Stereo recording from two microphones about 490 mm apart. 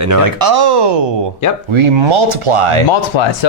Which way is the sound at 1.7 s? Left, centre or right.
Right.